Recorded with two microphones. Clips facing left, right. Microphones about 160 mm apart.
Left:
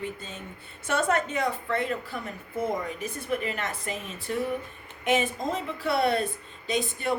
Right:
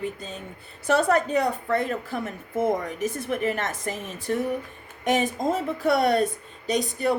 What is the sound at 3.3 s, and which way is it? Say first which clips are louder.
Speech: right 2 dB; 50° right (ahead or behind).